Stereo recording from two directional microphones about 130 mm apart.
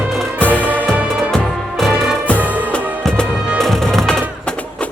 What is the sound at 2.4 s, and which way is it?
Music, 15° right (ahead or behind).